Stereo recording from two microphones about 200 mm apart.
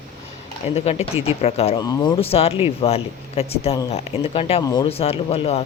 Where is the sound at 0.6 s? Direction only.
30° left (ahead or behind).